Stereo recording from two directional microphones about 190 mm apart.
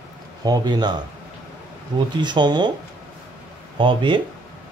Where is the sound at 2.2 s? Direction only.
25° right (ahead or behind).